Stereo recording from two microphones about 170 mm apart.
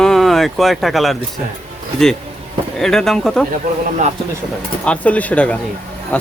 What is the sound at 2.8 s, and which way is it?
Speech, centre (ahead or behind).